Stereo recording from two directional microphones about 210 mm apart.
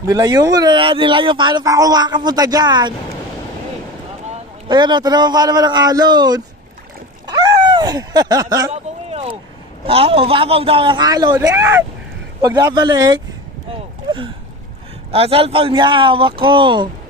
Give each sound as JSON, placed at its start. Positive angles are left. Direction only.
{"t": 0.0, "sound": "speech", "side_deg": -20}
{"t": 4.6, "sound": "speech", "side_deg": -20}
{"t": 7.2, "sound": "a sound", "side_deg": -20}
{"t": 9.1, "sound": "vehicle", "side_deg": -25}
{"t": 9.8, "sound": "speech", "side_deg": -25}
{"t": 15.0, "sound": "speech", "side_deg": -25}